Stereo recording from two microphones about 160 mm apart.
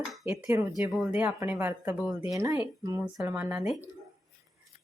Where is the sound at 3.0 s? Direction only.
10° right (ahead or behind).